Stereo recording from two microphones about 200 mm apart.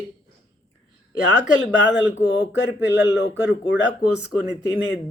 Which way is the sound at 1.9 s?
60° left (ahead or behind).